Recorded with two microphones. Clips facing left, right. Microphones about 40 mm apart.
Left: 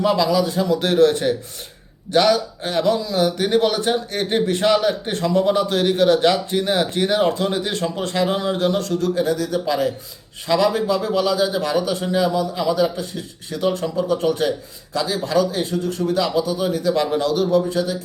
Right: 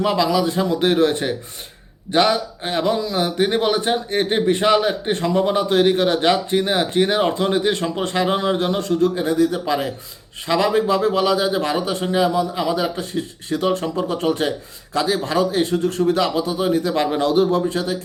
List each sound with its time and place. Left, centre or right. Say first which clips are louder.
0.0 s a man's voice: even; right